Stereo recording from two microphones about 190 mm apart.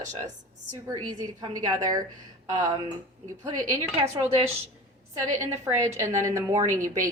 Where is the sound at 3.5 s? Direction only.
15° right (ahead or behind).